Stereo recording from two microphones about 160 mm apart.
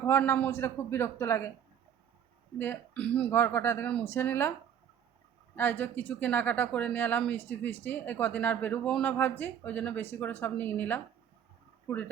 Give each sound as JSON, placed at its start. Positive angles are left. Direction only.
{"t": 0.0, "sound": "speech", "side_deg": 15}
{"t": 2.6, "sound": "speech", "side_deg": 10}
{"t": 5.5, "sound": "speech", "side_deg": 10}